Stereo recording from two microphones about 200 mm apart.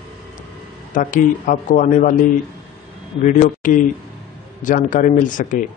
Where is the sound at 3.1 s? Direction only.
35° left (ahead or behind).